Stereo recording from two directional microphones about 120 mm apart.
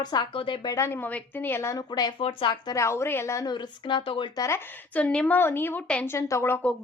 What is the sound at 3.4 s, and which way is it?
Speech, 40° left (ahead or behind).